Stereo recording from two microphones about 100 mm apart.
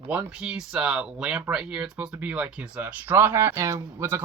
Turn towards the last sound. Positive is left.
turn(degrees=-25)  # may be behind; listen again after turning